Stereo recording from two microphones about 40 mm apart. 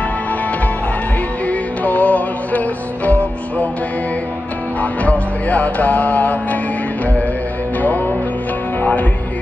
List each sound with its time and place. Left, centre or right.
1.5 s music: left
5.0 s music: left